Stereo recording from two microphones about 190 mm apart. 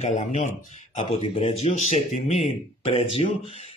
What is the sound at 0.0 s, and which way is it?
Speech, 40° left (ahead or behind).